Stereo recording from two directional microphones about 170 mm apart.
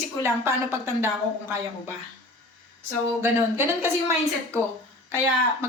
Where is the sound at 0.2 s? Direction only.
15° right (ahead or behind).